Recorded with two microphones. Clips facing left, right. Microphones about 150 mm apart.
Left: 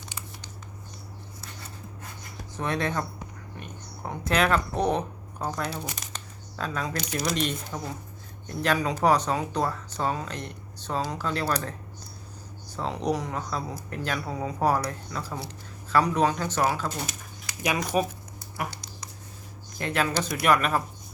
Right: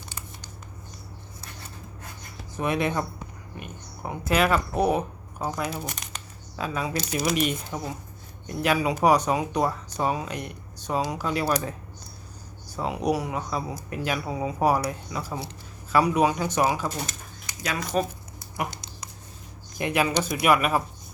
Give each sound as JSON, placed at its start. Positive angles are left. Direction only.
{"t": 2.6, "sound": "speech", "side_deg": -10}
{"t": 6.0, "sound": "a sound", "side_deg": -10}
{"t": 7.1, "sound": "speech", "side_deg": -5}
{"t": 12.7, "sound": "speech", "side_deg": -10}
{"t": 17.6, "sound": "speech", "side_deg": 15}
{"t": 18.5, "sound": "a sound", "side_deg": -20}
{"t": 19.8, "sound": "speech", "side_deg": -15}